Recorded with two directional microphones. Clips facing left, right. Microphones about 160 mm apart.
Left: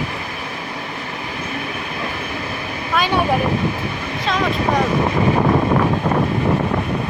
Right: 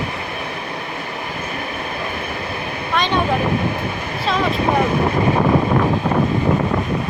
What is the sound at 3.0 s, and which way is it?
Vehicle, 10° left (ahead or behind).